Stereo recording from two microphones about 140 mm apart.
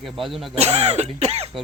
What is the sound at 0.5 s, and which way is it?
Throat clearing, 50° right (ahead or behind).